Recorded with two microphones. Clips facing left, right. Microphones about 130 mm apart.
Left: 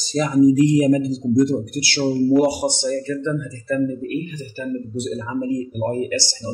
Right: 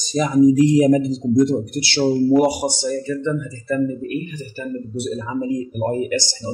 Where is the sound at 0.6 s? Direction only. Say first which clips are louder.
Right 1 dB; 30° right (ahead or behind).